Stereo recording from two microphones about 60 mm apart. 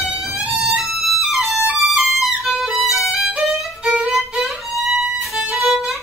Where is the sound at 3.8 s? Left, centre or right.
Right.